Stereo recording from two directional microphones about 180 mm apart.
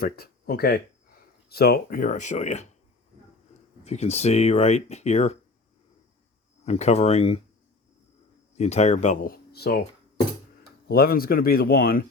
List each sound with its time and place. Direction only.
0.0 s speech: 60° left (ahead or behind); by 2.6 s 40° left (ahead or behind)
3.8 s speech: 35° left (ahead or behind)
6.7 s speech: 35° left (ahead or behind)
8.5 s speech: 35° left (ahead or behind); by 9.8 s 60° left (ahead or behind)
10.8 s speech: 55° left (ahead or behind)